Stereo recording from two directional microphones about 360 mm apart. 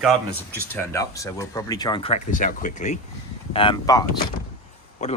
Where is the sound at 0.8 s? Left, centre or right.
Centre.